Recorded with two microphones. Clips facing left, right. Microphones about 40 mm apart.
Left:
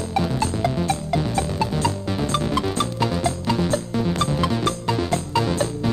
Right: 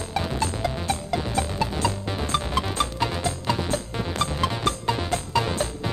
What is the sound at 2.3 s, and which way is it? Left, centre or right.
Music, centre.